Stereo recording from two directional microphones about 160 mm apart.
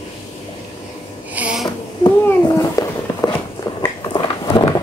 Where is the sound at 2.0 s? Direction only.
25° left (ahead or behind).